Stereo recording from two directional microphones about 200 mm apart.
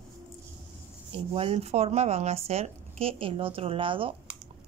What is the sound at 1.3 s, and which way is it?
A woman's voice, 30° right (ahead or behind).